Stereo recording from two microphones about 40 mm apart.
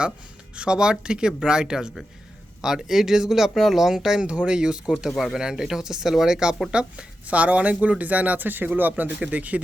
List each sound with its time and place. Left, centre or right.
0.5 s speech: right
4.3 s speech: right
5.0 s speech: centre
6.7 s speech: right
9.2 s speech: right